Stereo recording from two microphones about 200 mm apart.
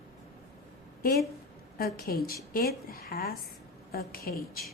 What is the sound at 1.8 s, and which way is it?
A woman's voice, 50° left (ahead or behind).